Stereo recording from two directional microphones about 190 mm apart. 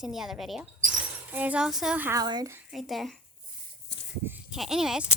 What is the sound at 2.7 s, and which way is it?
Speech, centre (ahead or behind).